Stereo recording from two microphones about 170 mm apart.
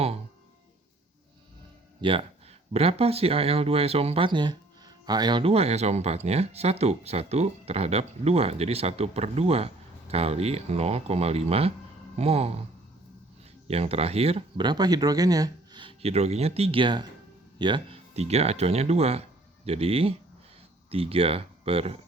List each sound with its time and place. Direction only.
2.0 s speech: 30° right (ahead or behind)
13.7 s speech: 35° right (ahead or behind)